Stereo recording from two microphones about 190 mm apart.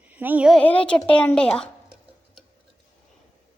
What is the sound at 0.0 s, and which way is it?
Speech, 10° right (ahead or behind).